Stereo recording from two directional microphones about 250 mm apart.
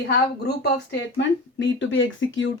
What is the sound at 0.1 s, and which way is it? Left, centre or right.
Speech, left.